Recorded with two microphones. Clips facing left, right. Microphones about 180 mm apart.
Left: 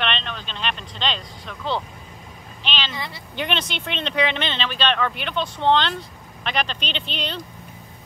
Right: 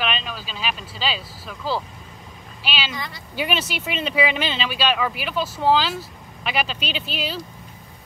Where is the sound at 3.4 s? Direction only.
5° right (ahead or behind).